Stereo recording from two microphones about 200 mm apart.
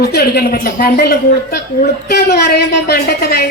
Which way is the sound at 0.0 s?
50° left (ahead or behind).